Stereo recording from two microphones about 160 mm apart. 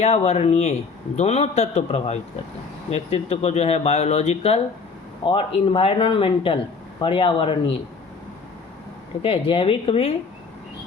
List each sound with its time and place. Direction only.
0.0 s a man's voice: 40° left (ahead or behind)
9.2 s a man's voice: 35° left (ahead or behind)